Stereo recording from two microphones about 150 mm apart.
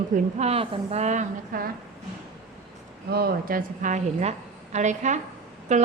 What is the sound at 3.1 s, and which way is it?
A woman's voice, 90° right.